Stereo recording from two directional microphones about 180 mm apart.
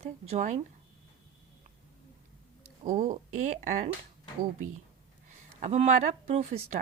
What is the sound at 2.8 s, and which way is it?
Speech, 45° right (ahead or behind).